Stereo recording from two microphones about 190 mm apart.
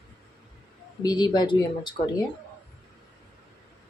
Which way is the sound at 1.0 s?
20° left (ahead or behind).